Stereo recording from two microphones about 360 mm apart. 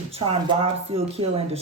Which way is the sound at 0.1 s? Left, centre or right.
Centre.